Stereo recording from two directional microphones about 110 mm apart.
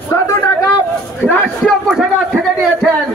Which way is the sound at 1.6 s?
Centre (ahead or behind).